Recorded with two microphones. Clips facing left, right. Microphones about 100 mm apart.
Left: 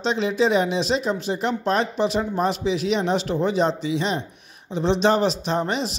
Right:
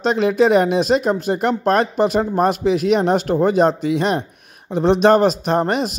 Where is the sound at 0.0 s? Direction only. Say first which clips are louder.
Right 6 dB; 55° right (ahead or behind).